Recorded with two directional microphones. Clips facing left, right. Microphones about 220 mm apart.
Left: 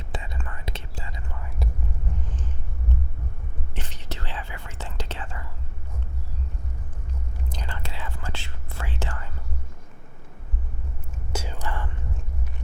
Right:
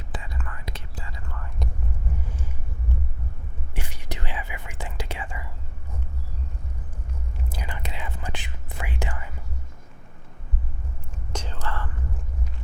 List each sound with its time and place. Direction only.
0.1 s whispering: 25° left (ahead or behind)
2.2 s vehicle: 10° right (ahead or behind)
3.8 s whispering: 10° right (ahead or behind)
7.5 s whispering: 10° right (ahead or behind)
11.3 s whispering: 10° left (ahead or behind)